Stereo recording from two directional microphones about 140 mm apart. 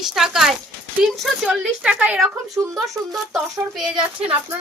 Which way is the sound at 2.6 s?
25° right (ahead or behind).